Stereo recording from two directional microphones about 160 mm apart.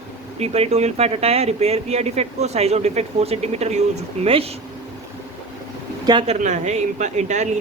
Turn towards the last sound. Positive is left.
turn(degrees=-45)  # may be behind; listen again after turning